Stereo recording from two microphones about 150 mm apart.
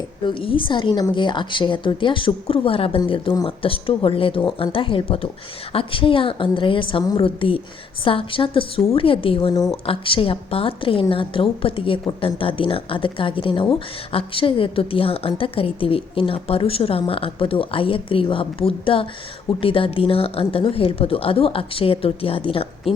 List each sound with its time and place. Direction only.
0.3 s speech: 35° left (ahead or behind)
9.8 s speech: 35° left (ahead or behind)